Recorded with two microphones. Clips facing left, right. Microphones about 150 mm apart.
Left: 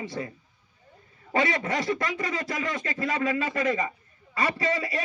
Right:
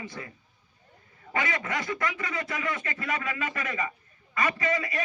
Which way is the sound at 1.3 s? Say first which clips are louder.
Left 5 dB; 30° left (ahead or behind).